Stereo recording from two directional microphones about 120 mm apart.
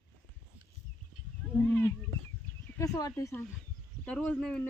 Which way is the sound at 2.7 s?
30° left (ahead or behind).